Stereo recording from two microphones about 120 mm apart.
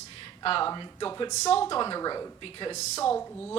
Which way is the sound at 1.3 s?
70° left (ahead or behind).